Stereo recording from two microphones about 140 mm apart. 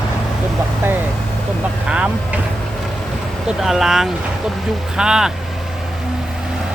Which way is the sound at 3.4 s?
5° right (ahead or behind).